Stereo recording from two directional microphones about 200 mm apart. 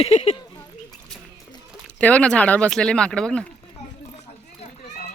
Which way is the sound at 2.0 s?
5° left (ahead or behind).